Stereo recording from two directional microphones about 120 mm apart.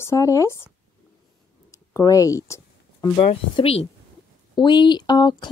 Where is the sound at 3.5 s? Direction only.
55° left (ahead or behind).